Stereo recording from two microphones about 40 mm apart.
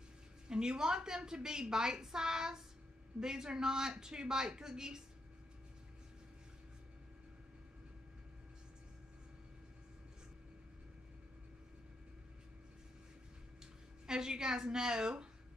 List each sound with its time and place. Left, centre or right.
0.5 s a woman's voice: centre
14.0 s a woman's voice: centre